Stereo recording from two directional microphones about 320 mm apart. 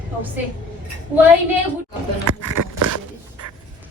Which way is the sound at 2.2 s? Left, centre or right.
Right.